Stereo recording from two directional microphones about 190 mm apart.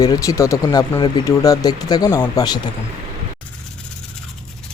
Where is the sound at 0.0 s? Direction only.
15° left (ahead or behind).